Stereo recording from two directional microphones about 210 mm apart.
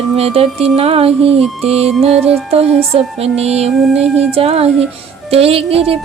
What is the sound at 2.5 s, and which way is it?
Speech, 30° right (ahead or behind).